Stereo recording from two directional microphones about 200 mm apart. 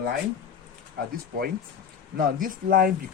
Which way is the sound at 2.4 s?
45° right (ahead or behind).